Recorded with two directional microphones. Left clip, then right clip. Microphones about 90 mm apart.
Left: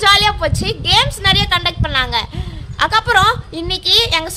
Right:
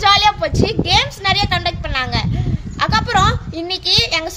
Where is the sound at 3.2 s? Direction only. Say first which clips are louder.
Left 3 dB; 45° left (ahead or behind).